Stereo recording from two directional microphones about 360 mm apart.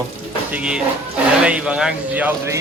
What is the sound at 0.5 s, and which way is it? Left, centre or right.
Speech, centre.